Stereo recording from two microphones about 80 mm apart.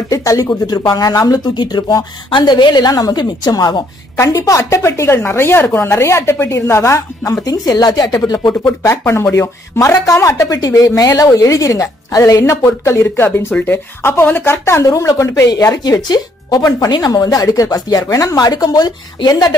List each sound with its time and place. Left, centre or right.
0.1 s speech: left
0.7 s speech: left
1.5 s a woman's voice: left
2.9 s a woman's voice: left
4.2 s a woman's voice: left
7.4 s speech: left
8.9 s a woman's voice: left
18.3 s a woman's voice: left